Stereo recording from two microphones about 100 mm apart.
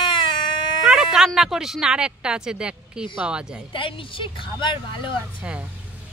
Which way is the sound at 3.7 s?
60° left (ahead or behind).